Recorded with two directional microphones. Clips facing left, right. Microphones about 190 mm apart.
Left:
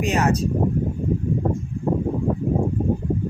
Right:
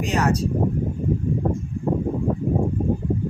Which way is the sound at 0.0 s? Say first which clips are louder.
Left 2 dB; 20° left (ahead or behind).